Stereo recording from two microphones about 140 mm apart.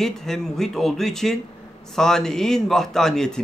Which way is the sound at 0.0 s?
5° left (ahead or behind).